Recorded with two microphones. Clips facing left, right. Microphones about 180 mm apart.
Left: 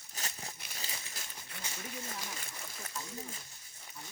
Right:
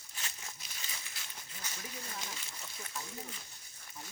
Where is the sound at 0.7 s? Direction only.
40° left (ahead or behind).